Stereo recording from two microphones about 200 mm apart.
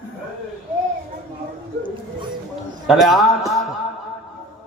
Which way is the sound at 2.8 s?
Centre (ahead or behind).